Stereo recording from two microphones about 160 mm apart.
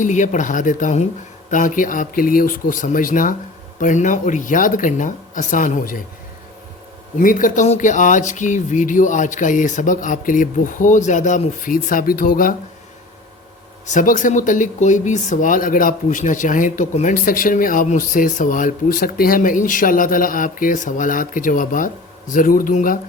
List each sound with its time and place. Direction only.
0.0 s speech: 50° left (ahead or behind)
7.2 s speech: 55° left (ahead or behind)
13.8 s speech: 55° left (ahead or behind)